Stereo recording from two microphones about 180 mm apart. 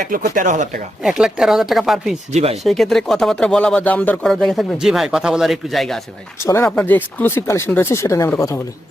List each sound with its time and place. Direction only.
0.0 s speech: 50° right (ahead or behind)
1.0 s speech: 5° right (ahead or behind)
2.3 s speech: 35° right (ahead or behind)
2.6 s speech: centre (ahead or behind)
6.4 s speech: 15° left (ahead or behind)